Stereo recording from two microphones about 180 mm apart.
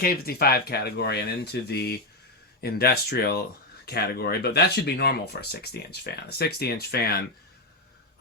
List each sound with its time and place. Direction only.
0.0 s speech: 60° left (ahead or behind)